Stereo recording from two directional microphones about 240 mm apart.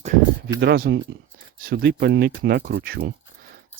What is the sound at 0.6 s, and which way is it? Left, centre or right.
Speech, right.